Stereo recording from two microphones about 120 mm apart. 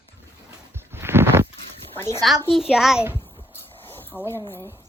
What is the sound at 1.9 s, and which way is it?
Speech, 20° left (ahead or behind).